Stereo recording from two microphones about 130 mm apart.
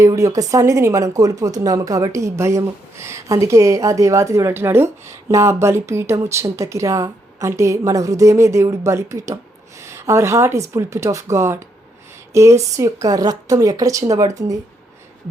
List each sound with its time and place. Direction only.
0.0 s speech: 25° right (ahead or behind)